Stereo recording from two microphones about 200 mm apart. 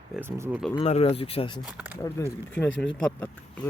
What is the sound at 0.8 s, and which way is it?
Speech, 30° left (ahead or behind).